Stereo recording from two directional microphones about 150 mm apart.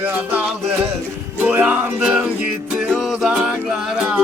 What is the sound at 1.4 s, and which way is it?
Music, 10° right (ahead or behind).